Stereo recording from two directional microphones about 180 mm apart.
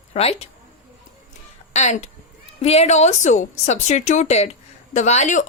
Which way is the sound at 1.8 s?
40° left (ahead or behind).